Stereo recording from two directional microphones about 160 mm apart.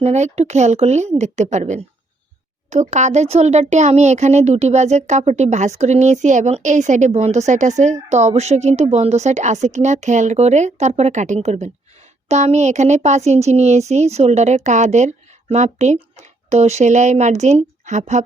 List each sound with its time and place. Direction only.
0.0 s speech: 45° right (ahead or behind)